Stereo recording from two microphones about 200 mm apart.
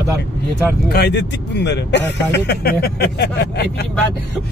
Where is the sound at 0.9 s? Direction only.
60° left (ahead or behind).